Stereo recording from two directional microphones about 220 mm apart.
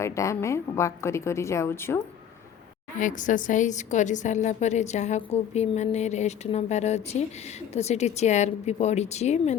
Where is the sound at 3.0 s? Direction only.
35° left (ahead or behind).